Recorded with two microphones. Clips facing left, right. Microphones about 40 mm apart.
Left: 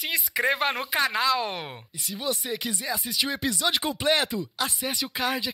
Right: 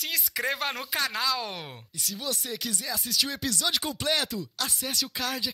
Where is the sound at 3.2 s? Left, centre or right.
Centre.